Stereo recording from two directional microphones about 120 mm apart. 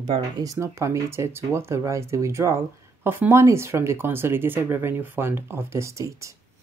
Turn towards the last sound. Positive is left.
turn(degrees=-25)  # may be behind; listen again after turning